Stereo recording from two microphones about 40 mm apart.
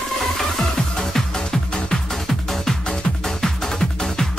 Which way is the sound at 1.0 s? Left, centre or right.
Centre.